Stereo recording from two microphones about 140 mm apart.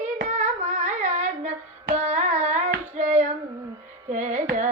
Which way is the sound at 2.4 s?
60° right (ahead or behind).